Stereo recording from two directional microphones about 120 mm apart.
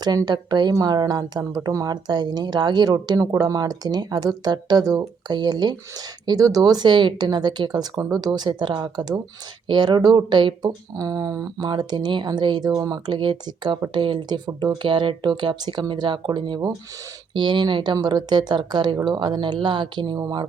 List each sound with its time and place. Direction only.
0.0 s speech: 35° right (ahead or behind)